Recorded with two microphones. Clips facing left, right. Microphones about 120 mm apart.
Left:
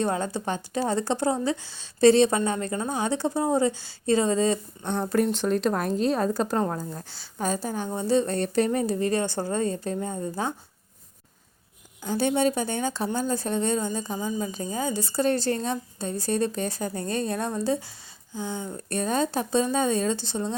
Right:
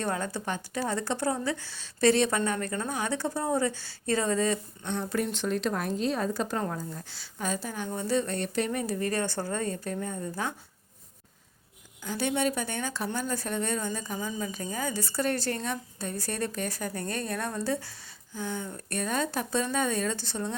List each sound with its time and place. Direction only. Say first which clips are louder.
0.0 s speech: left 5 dB; 20° left (ahead or behind)
4.9 s a woman's voice: left 6 dB; 40° left (ahead or behind); by 10.5 s 25° left (ahead or behind)
12.0 s speech: left 5 dB; 30° left (ahead or behind)